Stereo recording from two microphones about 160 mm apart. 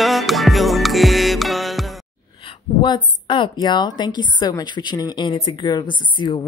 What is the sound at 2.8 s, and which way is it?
A woman's voice, 30° left (ahead or behind).